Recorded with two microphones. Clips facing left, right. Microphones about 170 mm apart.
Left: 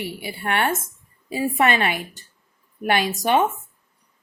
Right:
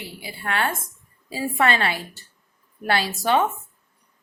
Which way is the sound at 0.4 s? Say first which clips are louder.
Left 3 dB; 25° left (ahead or behind).